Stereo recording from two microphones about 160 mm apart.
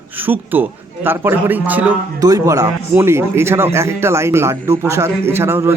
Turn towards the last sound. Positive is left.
turn(degrees=-15)  # may be behind; listen again after turning